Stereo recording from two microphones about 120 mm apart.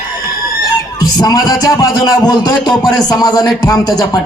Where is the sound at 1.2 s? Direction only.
30° left (ahead or behind).